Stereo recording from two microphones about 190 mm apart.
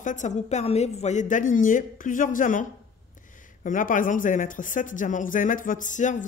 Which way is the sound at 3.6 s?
45° left (ahead or behind).